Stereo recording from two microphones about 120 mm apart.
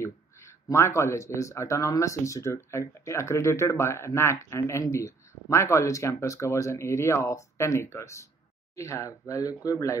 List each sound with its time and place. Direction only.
0.0 s speech: 20° left (ahead or behind)